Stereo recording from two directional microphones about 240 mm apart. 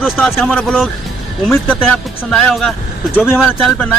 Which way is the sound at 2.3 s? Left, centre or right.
Centre.